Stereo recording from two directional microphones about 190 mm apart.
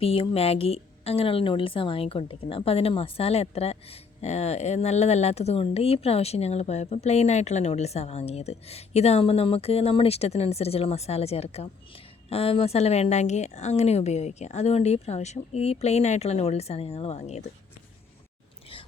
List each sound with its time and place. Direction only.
0.0 s a woman's voice: 30° left (ahead or behind)